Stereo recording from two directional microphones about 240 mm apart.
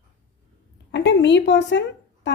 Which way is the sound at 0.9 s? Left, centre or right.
Left.